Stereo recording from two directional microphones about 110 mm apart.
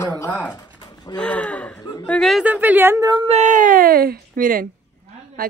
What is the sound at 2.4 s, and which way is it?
Speech, 15° right (ahead or behind).